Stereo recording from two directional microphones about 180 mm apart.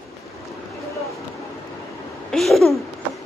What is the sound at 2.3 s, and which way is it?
Babbling, centre (ahead or behind).